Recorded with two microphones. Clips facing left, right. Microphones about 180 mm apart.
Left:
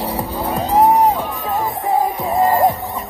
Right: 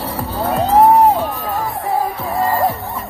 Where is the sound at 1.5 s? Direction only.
20° left (ahead or behind).